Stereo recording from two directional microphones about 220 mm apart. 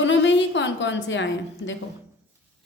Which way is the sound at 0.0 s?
55° left (ahead or behind).